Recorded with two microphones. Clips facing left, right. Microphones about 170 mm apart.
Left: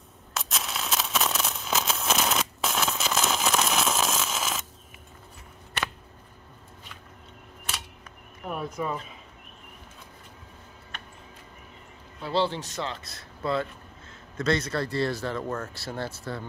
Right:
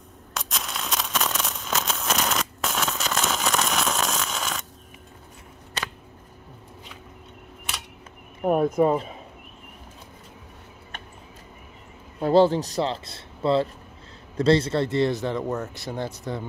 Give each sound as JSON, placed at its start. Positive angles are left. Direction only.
{"t": 0.3, "sound": "a sound", "side_deg": 0}
{"t": 8.4, "sound": "speech", "side_deg": -50}
{"t": 12.2, "sound": "a man's voice", "side_deg": -45}